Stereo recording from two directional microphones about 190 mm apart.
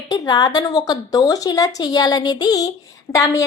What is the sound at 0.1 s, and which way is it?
A woman's voice, 20° left (ahead or behind).